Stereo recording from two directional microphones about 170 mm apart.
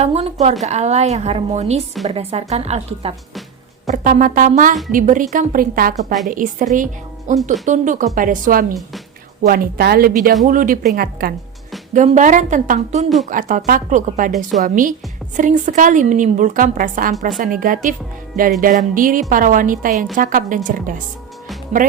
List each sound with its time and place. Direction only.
0.0 s a woman's voice: 40° right (ahead or behind)
3.8 s a woman's voice: 50° right (ahead or behind)
11.9 s a woman's voice: 45° right (ahead or behind)